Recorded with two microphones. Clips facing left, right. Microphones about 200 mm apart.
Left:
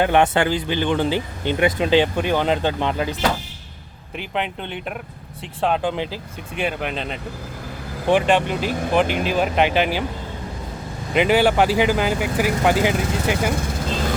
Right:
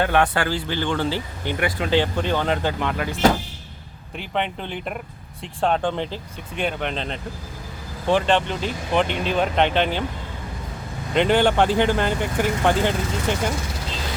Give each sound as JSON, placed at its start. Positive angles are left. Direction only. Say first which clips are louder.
{"t": 0.0, "sound": "speech", "louder": "left 3 dB", "side_deg": 20}
{"t": 4.2, "sound": "speech", "louder": "even", "side_deg": 0}
{"t": 11.1, "sound": "speech", "louder": "left 1 dB", "side_deg": 5}